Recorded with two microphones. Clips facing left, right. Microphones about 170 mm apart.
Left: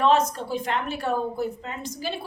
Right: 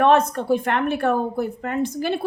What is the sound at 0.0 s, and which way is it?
A woman's voice, 60° right (ahead or behind).